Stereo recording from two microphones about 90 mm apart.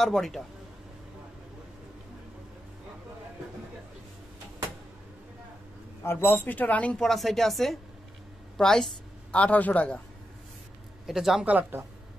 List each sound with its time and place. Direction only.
0.0 s speech: 5° left (ahead or behind)
6.0 s speech: 25° left (ahead or behind)
7.0 s a woman's voice: centre (ahead or behind)
11.1 s speech: 5° right (ahead or behind)
11.4 s speech: 15° right (ahead or behind)